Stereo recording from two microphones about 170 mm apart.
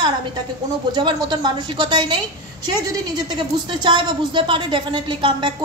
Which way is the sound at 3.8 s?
30° right (ahead or behind).